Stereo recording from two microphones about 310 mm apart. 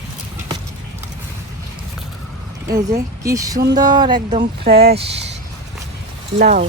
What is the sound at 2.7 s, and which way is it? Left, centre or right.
Speech, right.